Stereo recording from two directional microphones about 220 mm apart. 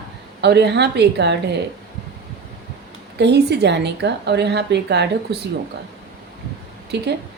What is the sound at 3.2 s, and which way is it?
A woman's voice, 50° right (ahead or behind).